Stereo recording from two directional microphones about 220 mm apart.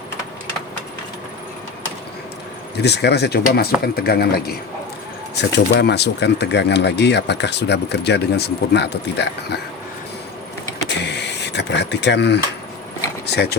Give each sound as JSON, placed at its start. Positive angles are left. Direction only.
{"t": 2.7, "sound": "speech", "side_deg": 50}
{"t": 10.8, "sound": "vehicle", "side_deg": 50}
{"t": 13.2, "sound": "speech", "side_deg": 50}